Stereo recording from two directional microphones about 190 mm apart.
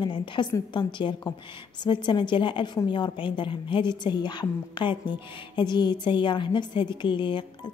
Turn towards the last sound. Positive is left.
turn(degrees=25)  # may be behind; listen again after turning